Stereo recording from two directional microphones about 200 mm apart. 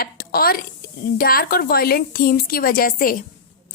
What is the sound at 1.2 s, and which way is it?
A woman's voice, 45° left (ahead or behind).